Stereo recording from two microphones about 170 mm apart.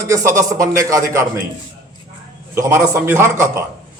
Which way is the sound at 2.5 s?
15° right (ahead or behind).